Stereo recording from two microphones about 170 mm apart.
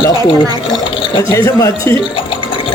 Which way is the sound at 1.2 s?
15° left (ahead or behind).